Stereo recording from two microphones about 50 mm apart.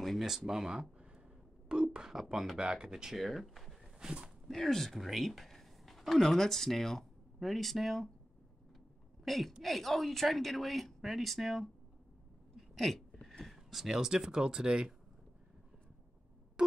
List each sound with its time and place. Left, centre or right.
0.0 s speech: centre
1.7 s whispering: centre
2.1 s speech: centre
3.2 s speech: centre
4.0 s speech: centre
4.5 s speech: centre
9.2 s a woman's voice: centre
12.5 s a sound: centre
13.7 s speech: centre
16.6 s a sound: centre